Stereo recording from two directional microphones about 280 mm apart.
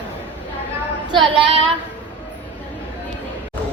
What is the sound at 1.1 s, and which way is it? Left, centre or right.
Speech, centre.